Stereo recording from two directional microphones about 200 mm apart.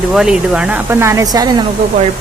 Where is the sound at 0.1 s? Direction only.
5° right (ahead or behind); by 1.5 s 20° right (ahead or behind).